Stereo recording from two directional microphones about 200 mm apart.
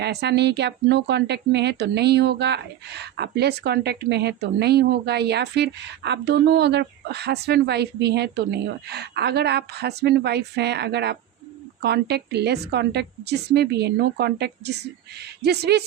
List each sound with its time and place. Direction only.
0.0 s speech: 55° right (ahead or behind)